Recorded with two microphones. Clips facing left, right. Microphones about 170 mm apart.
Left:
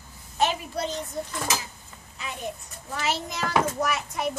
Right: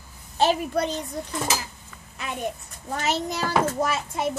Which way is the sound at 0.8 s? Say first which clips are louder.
Right 2 dB; 60° right (ahead or behind).